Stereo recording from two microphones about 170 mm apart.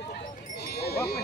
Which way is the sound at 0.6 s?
65° left (ahead or behind).